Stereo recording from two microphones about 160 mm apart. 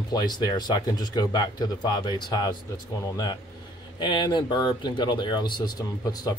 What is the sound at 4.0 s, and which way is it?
Speech, 30° left (ahead or behind).